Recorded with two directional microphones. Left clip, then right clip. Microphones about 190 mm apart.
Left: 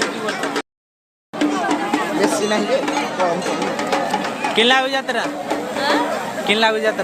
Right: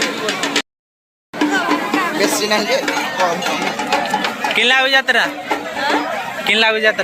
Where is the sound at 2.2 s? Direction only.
45° left (ahead or behind).